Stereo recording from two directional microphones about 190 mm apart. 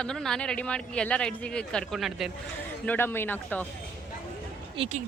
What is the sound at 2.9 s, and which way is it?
Speech, 10° left (ahead or behind).